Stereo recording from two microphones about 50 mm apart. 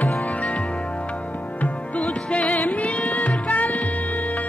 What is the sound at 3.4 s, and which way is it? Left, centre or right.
Music, left.